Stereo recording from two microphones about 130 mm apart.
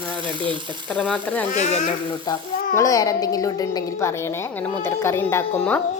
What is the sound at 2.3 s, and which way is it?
A woman's voice, 30° left (ahead or behind).